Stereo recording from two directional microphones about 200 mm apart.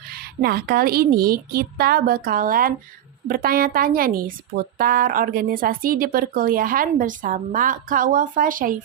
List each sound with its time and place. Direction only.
0.1 s speech: 50° right (ahead or behind)